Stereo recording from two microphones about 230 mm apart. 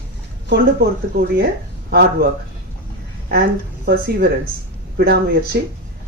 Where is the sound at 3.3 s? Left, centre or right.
Right.